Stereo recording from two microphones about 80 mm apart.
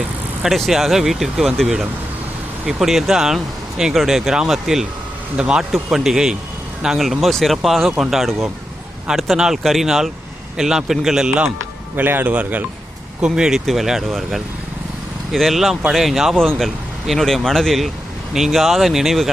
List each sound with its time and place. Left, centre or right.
0.4 s speech: centre
11.9 s a man's voice: right
13.2 s speech: centre